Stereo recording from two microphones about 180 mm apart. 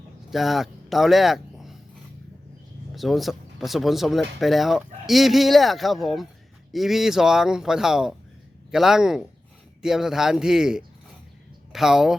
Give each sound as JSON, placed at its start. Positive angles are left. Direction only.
{"t": 0.3, "sound": "speech", "side_deg": 0}
{"t": 2.9, "sound": "speech", "side_deg": 0}